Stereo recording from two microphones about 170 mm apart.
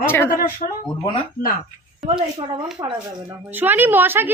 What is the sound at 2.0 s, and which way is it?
Speech, 30° right (ahead or behind).